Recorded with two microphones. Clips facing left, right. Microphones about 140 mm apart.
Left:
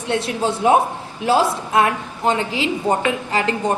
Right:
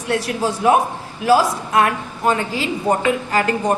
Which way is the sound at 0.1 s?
25° left (ahead or behind).